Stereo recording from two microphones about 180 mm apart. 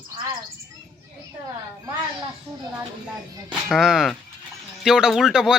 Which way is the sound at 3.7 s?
5° right (ahead or behind).